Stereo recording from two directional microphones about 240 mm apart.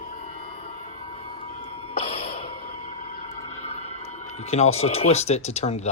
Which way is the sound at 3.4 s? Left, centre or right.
Left.